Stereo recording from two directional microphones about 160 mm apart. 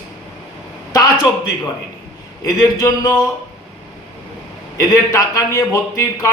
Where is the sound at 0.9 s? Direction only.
25° left (ahead or behind).